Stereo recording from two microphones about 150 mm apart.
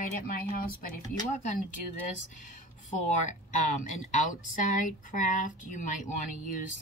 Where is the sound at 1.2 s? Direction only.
55° left (ahead or behind).